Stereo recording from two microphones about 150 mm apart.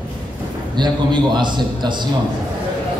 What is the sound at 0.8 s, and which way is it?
A man's voice, 30° right (ahead or behind).